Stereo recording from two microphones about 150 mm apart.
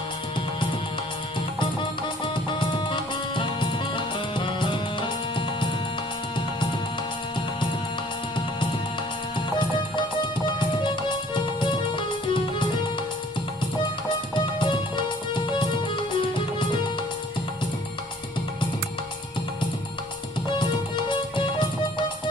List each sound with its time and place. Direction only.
2.2 s music: 35° left (ahead or behind)
10.4 s music: 30° left (ahead or behind)
14.1 s music: 30° left (ahead or behind)
20.5 s music: 30° left (ahead or behind)